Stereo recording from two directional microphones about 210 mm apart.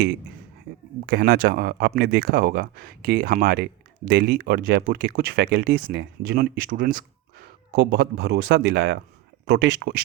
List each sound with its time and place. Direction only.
1.0 s speech: 50° right (ahead or behind)